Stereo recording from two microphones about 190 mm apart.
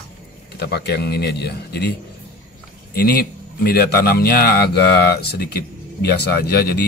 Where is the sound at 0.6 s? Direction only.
60° left (ahead or behind).